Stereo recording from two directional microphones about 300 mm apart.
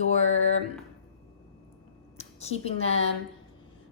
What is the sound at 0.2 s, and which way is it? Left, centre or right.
Speech, left.